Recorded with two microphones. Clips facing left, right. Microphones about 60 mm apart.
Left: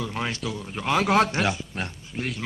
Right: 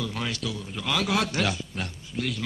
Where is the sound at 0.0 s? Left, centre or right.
Left.